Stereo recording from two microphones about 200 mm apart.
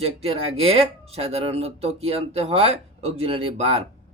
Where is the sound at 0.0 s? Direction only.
30° right (ahead or behind).